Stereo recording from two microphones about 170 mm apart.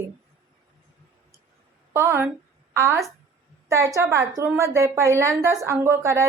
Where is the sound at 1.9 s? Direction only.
15° right (ahead or behind).